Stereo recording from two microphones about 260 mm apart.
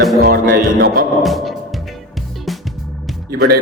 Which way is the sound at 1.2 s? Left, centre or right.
Centre.